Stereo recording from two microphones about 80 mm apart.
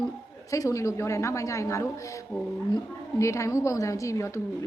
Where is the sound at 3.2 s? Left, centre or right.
Left.